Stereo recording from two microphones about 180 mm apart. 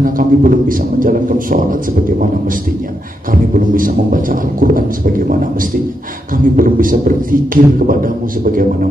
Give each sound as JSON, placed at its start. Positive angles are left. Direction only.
{"t": 0.0, "sound": "a man's voice", "side_deg": -50}
{"t": 3.5, "sound": "a man's voice", "side_deg": -50}